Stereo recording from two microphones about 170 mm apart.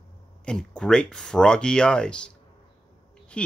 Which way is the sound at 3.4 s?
5° left (ahead or behind).